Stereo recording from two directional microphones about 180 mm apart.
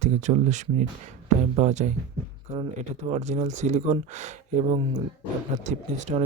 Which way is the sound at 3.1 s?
40° right (ahead or behind).